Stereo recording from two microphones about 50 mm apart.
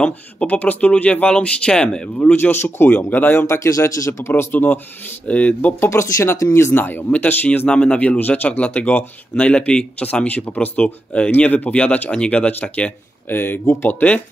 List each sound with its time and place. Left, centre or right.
0.4 s speech: left
2.1 s speech: left
2.5 s speech: left
3.0 s speech: left
3.4 s speech: left
4.3 s speech: left
5.3 s speech: left
5.9 s speech: left
6.7 s speech: left
7.1 s speech: left
7.6 s speech: centre
13.3 s speech: left